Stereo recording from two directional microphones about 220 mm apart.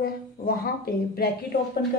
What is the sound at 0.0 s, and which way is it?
A woman's voice, 45° left (ahead or behind).